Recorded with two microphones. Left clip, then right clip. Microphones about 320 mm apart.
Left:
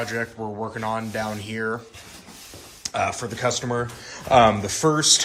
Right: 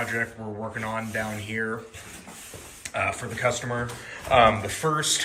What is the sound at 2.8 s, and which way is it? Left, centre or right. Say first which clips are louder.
Speech: left 3 dB; centre.